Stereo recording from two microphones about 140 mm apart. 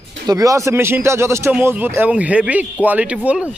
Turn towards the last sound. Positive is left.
turn(degrees=-10)  # may be behind; listen again after turning